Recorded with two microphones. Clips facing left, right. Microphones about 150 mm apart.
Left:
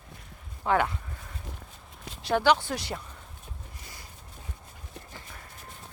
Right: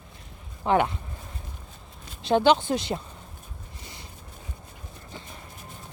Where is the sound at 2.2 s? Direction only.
25° right (ahead or behind).